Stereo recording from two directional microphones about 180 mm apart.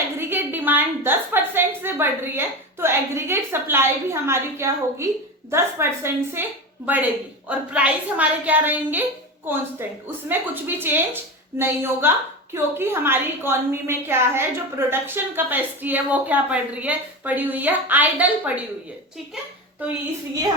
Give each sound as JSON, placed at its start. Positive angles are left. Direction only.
{"t": 0.2, "sound": "a woman's voice", "side_deg": -10}